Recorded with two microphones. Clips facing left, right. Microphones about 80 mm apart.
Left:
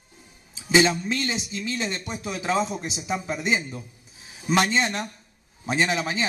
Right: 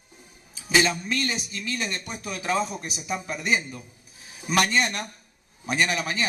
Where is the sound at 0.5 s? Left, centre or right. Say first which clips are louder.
Left 3 dB; left.